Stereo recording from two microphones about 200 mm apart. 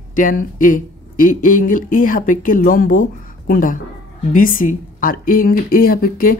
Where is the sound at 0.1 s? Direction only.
40° left (ahead or behind).